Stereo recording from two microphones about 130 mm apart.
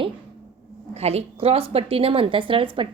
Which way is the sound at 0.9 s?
55° right (ahead or behind).